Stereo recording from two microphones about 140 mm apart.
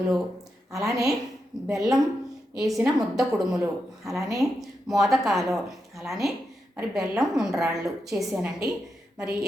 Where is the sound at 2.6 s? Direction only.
25° right (ahead or behind).